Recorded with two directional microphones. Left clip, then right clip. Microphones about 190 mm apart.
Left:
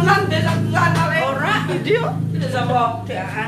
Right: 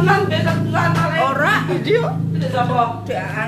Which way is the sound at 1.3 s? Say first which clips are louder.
Right 3 dB; 55° right (ahead or behind).